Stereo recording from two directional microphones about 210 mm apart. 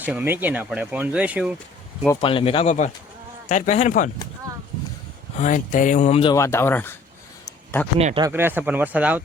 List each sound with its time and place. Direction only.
0.0 s speech: 5° right (ahead or behind)
2.2 s speech: 25° left (ahead or behind)
5.4 s speech: 35° left (ahead or behind)
6.3 s speech: 15° left (ahead or behind)
7.9 s speech: 30° right (ahead or behind)
8.2 s speech: 10° right (ahead or behind)